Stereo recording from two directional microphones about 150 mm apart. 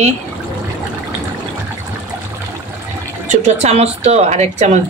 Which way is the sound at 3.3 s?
50° right (ahead or behind).